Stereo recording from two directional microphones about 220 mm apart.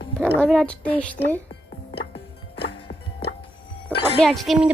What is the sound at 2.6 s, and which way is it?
Music, 50° left (ahead or behind).